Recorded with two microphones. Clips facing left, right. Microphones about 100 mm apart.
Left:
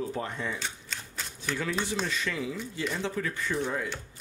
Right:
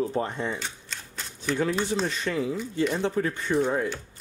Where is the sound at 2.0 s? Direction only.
35° right (ahead or behind).